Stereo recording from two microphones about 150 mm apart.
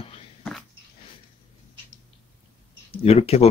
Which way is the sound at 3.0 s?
45° left (ahead or behind).